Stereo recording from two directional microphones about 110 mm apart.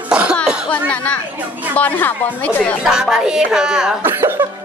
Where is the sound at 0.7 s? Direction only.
10° left (ahead or behind).